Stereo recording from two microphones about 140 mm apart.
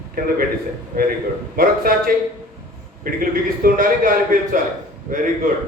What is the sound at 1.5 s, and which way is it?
A man's voice, 90° right.